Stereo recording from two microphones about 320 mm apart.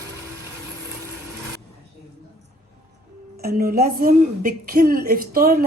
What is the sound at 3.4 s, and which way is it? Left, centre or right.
A woman's voice, right.